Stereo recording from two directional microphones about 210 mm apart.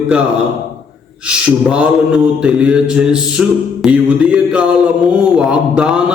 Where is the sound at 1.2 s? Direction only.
5° right (ahead or behind).